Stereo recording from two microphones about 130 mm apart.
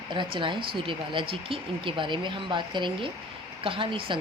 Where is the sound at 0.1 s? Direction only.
40° right (ahead or behind).